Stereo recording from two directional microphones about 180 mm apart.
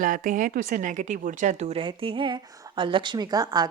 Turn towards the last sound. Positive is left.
turn(degrees=-20)  # may be behind; listen again after turning